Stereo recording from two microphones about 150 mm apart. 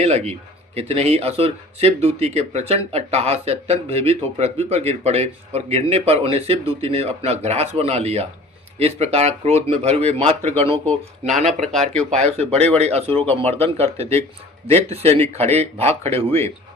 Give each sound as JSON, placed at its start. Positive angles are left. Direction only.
{"t": 0.0, "sound": "speech", "side_deg": -45}